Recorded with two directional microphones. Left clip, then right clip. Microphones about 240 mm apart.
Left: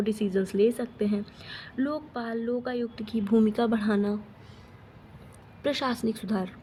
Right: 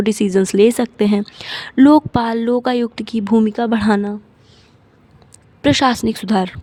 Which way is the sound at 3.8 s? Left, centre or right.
Right.